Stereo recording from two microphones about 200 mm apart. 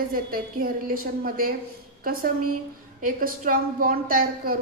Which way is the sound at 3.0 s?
45° right (ahead or behind).